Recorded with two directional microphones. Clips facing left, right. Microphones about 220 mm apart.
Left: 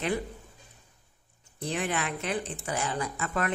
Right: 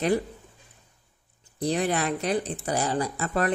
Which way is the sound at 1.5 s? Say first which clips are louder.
Right 6 dB; 35° right (ahead or behind).